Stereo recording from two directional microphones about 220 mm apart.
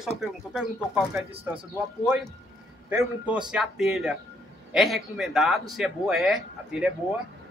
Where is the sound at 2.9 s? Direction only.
10° right (ahead or behind).